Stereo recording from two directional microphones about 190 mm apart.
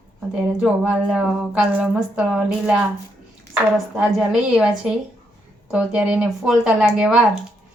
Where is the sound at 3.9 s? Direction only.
5° right (ahead or behind).